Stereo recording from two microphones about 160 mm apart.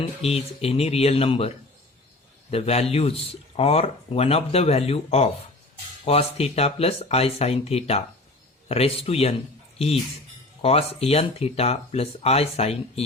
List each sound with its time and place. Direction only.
0.0 s speech: 40° left (ahead or behind)